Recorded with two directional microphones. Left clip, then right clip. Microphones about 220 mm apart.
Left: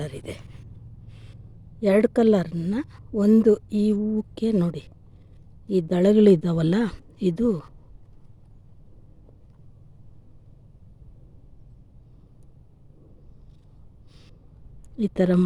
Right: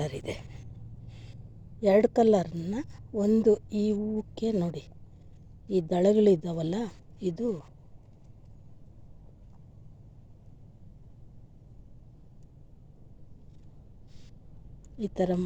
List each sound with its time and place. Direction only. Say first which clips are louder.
0.0 s speech: even; 10° left (ahead or behind)
1.8 s a woman's voice: left 2 dB; 25° left (ahead or behind)
7.4 s speech: left 7 dB; 55° left (ahead or behind)
14.9 s speech: left 6 dB; 30° left (ahead or behind)